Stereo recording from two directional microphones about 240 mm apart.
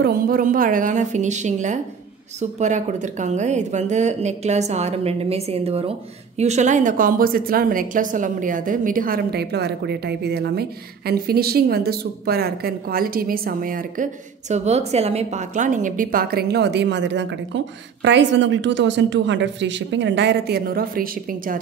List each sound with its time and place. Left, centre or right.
0.0 s a woman's voice: right